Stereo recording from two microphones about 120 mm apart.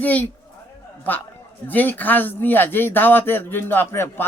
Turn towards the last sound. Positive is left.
turn(degrees=20)  # may be behind; listen again after turning